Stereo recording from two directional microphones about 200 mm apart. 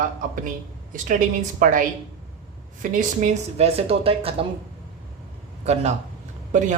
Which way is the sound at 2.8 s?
40° right (ahead or behind).